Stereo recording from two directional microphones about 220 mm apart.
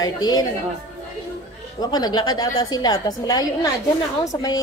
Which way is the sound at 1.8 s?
20° left (ahead or behind).